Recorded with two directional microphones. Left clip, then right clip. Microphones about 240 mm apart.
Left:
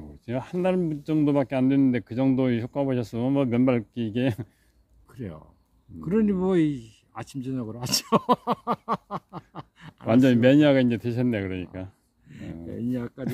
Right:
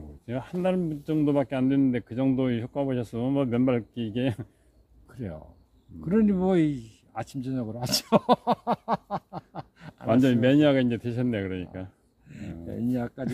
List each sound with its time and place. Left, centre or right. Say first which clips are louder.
0.2 s speech: left 2 dB; left
5.0 s a sound: right 1 dB; centre
6.0 s speech: even; centre
10.0 s speech: left 3 dB; left
12.3 s speech: left 1 dB; centre